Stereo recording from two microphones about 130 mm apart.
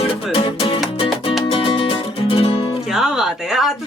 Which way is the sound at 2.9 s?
5° right (ahead or behind).